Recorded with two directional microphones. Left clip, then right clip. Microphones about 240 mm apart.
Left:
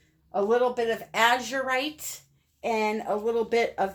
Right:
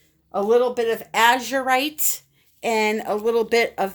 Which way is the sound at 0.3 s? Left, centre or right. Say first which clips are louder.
Right 5 dB; right.